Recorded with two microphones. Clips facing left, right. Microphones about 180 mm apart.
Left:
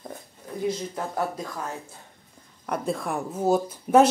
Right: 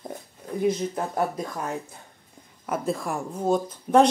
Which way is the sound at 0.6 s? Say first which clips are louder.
Right 4 dB; 20° right (ahead or behind).